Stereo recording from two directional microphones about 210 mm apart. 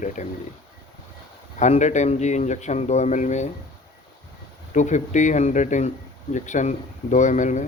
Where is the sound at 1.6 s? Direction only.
35° left (ahead or behind).